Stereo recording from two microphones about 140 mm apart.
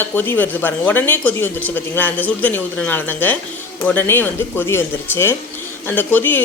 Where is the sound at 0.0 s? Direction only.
15° left (ahead or behind).